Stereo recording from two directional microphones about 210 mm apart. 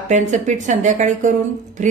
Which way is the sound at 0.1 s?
35° right (ahead or behind).